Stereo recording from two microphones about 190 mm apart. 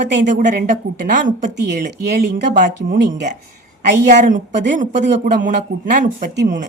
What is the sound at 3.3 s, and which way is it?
A woman's voice, 40° right (ahead or behind).